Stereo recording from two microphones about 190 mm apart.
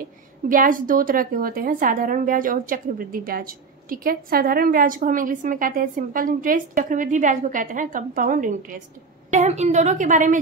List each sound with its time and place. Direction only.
0.0 s a woman's voice: 45° right (ahead or behind)